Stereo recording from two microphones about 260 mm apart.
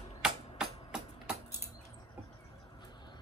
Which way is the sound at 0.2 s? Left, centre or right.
Centre.